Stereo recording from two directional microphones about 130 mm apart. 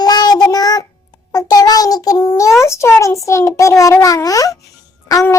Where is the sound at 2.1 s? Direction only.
20° left (ahead or behind).